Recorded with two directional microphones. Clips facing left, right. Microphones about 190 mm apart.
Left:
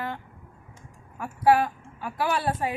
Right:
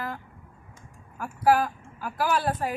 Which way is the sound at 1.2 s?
Centre (ahead or behind).